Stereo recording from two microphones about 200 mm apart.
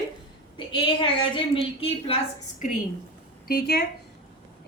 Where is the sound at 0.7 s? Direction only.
25° left (ahead or behind).